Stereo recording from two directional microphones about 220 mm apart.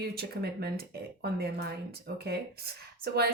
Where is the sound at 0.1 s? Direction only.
45° right (ahead or behind).